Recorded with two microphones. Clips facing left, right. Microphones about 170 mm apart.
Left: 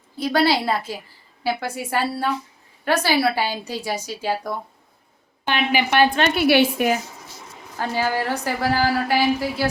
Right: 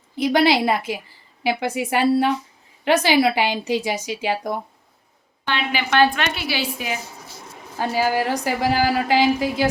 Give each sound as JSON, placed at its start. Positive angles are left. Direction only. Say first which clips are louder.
{"t": 0.2, "sound": "a woman's voice", "louder": "right 2 dB", "side_deg": -15}
{"t": 5.5, "sound": "a woman's voice", "louder": "left 2 dB", "side_deg": 15}
{"t": 6.3, "sound": "a woman's voice", "louder": "left 10 dB", "side_deg": 50}
{"t": 7.8, "sound": "a woman's voice", "louder": "right 2 dB", "side_deg": -15}